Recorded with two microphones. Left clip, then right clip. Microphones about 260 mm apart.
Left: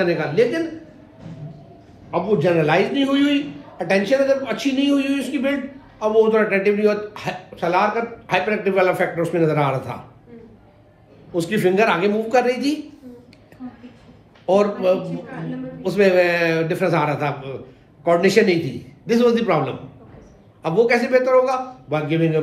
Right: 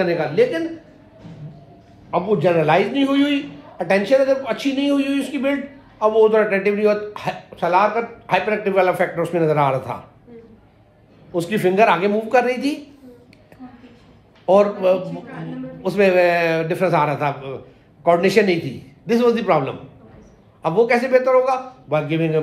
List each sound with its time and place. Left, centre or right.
0.0 s a man's voice: right
2.0 s a man's voice: right
11.3 s a man's voice: right
14.4 s a man's voice: right